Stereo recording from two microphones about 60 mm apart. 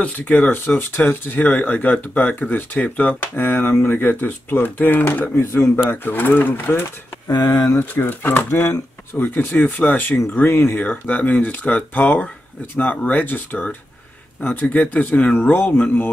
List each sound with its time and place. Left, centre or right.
0.0 s speech: left
0.5 s speech: left
5.4 s speech: left
5.9 s speech: left
7.2 s speech: left
7.8 s speech: left
10.8 s speech: left